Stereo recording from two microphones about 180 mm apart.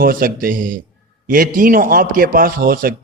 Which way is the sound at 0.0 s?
55° right (ahead or behind).